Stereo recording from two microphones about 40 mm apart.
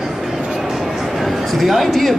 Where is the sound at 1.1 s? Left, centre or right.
Centre.